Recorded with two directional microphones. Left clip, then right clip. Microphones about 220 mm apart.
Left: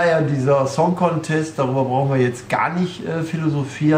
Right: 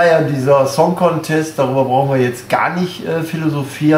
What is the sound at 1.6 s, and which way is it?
Speech, 25° right (ahead or behind).